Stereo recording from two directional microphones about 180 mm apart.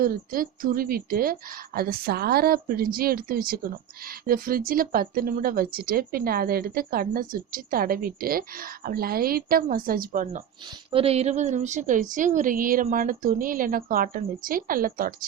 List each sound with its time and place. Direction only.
0.0 s a woman's voice: 50° right (ahead or behind)
10.7 s a woman's voice: 30° right (ahead or behind); by 15.1 s 50° right (ahead or behind)